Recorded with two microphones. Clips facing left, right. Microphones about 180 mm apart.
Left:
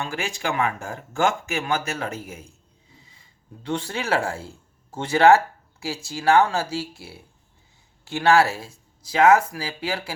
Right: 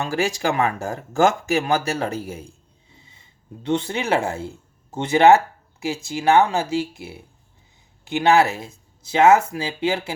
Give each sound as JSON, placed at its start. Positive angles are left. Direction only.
{"t": 0.0, "sound": "speech", "side_deg": -40}